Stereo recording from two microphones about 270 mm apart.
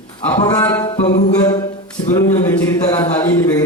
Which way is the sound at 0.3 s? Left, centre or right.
Centre.